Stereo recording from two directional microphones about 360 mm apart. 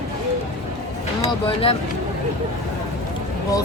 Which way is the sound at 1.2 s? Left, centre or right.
Centre.